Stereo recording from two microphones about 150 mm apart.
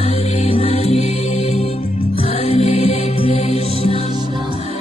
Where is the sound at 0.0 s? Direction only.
40° left (ahead or behind).